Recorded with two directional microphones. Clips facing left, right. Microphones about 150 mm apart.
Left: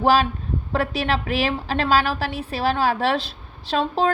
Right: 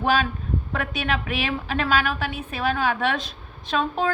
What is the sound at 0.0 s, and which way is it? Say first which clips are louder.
A woman's voice: left 4 dB; 35° left (ahead or behind).